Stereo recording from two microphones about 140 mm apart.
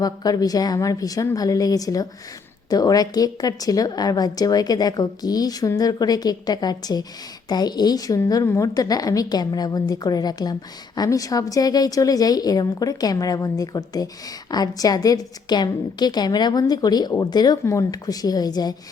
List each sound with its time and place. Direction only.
0.0 s a woman's voice: 25° left (ahead or behind)